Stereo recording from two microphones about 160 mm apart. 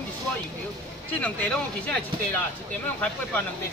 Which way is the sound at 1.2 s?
10° left (ahead or behind).